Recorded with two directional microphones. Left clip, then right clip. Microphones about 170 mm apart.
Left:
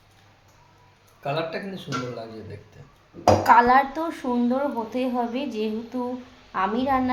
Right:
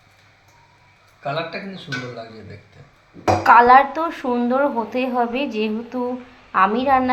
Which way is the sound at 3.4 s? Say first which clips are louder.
Right 8 dB; 15° right (ahead or behind).